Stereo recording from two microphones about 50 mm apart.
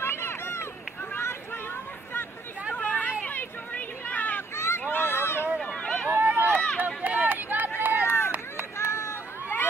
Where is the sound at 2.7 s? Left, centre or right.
Left.